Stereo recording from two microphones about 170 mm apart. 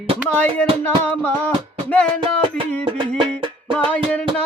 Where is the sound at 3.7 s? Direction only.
10° left (ahead or behind).